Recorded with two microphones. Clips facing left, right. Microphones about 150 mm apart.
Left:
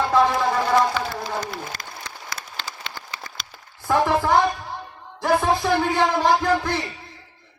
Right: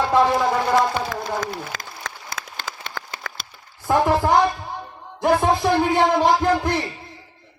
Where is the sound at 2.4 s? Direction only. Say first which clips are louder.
Right 2 dB; 90° right.